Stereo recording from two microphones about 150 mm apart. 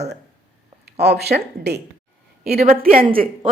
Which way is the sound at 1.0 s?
90° right.